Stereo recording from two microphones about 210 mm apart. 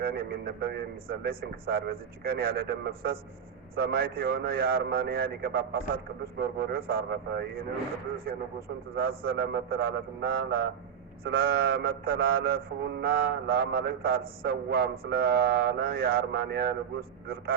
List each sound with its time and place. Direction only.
0.0 s mantra: 45° right (ahead or behind)
9.0 s mantra: 45° right (ahead or behind)